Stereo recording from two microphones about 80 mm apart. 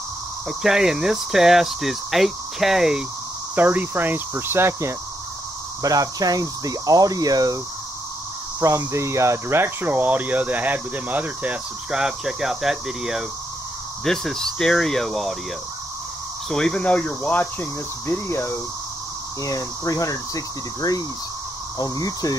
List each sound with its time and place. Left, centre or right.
0.5 s cricket: centre
3.5 s speech: right
5.8 s speech: right
8.5 s speech: right; by 12.0 s centre
12.0 s cricket: centre
14.0 s cricket: centre
16.4 s speech: centre; by 18.5 s left
19.4 s cricket: left